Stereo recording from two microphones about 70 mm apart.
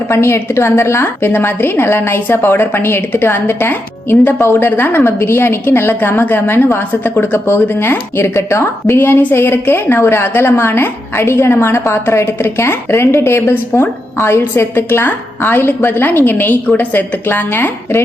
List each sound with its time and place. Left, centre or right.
0.1 s a woman's voice: left